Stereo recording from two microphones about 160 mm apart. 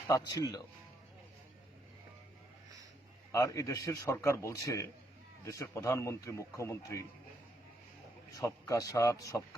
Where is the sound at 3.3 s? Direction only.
20° left (ahead or behind).